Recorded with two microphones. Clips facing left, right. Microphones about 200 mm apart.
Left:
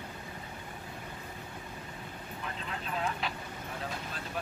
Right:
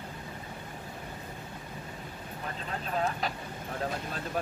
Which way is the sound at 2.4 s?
40° right (ahead or behind).